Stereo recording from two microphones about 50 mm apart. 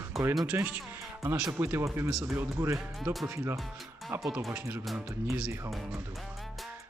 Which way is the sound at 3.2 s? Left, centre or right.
Right.